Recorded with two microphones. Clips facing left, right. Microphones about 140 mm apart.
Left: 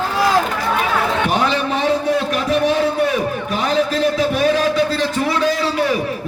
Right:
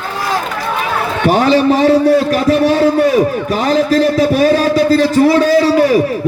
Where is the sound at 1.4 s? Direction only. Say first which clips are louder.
Right 8 dB; 35° right (ahead or behind).